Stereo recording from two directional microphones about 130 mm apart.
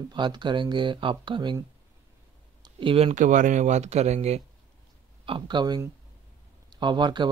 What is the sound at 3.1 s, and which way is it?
Speech, 75° right (ahead or behind).